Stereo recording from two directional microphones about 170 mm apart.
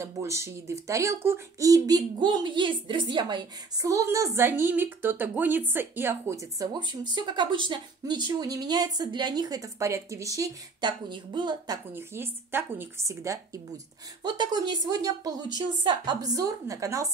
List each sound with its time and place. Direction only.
0.0 s speech: 15° right (ahead or behind)